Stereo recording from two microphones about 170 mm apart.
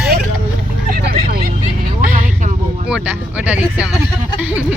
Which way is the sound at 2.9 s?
10° right (ahead or behind).